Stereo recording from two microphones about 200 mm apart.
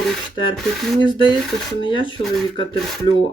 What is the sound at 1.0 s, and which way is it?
Speech, 25° left (ahead or behind).